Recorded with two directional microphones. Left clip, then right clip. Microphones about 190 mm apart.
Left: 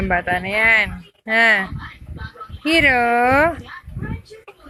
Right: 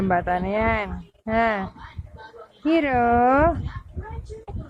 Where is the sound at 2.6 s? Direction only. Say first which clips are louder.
Left 5 dB; 10° right (ahead or behind).